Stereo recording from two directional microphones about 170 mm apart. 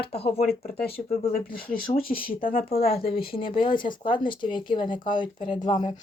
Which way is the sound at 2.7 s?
35° left (ahead or behind).